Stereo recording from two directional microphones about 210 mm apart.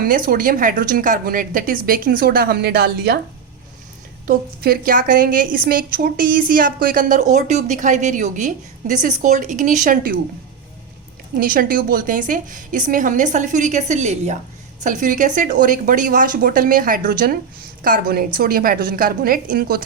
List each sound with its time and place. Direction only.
0.0 s a woman's voice: 45° right (ahead or behind)
4.3 s a woman's voice: 45° right (ahead or behind)
11.3 s a woman's voice: 40° right (ahead or behind)